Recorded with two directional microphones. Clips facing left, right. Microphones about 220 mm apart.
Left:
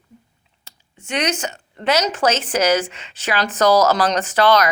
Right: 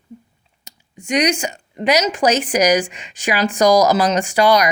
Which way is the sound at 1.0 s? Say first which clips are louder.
Right 5 dB; 15° right (ahead or behind).